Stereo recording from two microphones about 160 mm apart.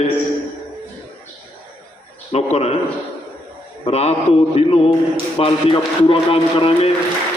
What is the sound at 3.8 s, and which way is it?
A man's voice, 40° left (ahead or behind).